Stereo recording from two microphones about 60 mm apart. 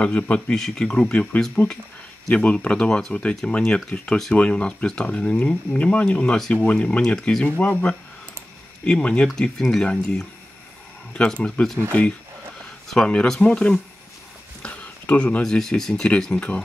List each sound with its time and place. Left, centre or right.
0.0 s a man's voice: centre
0.6 s a man's voice: centre
7.4 s a man's voice: left
9.3 s speech: centre
12.8 s speech: centre
14.6 s a sound: left
15.4 s speech: centre
16.3 s a man's voice: centre